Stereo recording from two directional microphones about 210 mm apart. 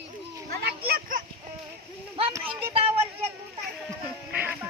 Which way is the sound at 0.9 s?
40° right (ahead or behind).